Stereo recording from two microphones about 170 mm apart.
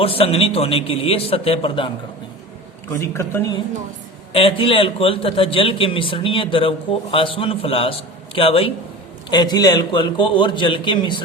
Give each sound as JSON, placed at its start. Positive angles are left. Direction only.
{"t": 0.0, "sound": "a man's voice", "side_deg": 35}
{"t": 3.0, "sound": "a woman's voice", "side_deg": 15}
{"t": 4.3, "sound": "a man's voice", "side_deg": 30}